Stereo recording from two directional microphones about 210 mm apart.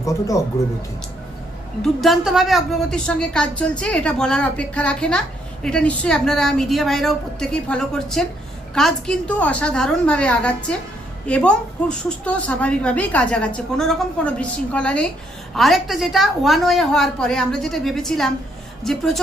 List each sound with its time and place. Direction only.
0.0 s speech: 15° left (ahead or behind)
1.8 s a woman's voice: centre (ahead or behind)